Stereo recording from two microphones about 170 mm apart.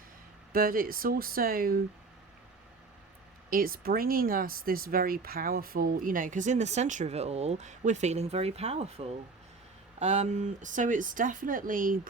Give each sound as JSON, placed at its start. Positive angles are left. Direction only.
{"t": 0.5, "sound": "speech", "side_deg": -60}
{"t": 3.5, "sound": "speech", "side_deg": -60}